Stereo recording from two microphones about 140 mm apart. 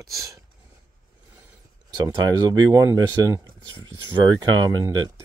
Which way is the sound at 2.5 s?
25° right (ahead or behind).